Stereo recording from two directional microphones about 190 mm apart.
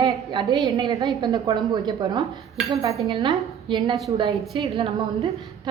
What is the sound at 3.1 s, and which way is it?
A woman's voice, 25° right (ahead or behind).